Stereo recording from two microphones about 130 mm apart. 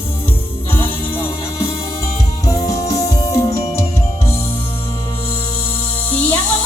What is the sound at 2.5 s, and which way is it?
Music, 25° left (ahead or behind).